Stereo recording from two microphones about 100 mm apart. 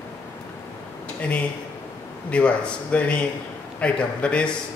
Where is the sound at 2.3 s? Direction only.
10° left (ahead or behind).